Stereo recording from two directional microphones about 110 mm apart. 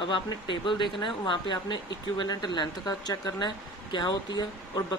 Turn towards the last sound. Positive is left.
turn(degrees=40)  # may be behind; listen again after turning